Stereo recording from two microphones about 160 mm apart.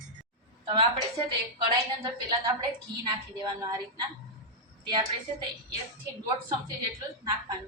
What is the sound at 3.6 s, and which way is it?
Speech, 25° right (ahead or behind).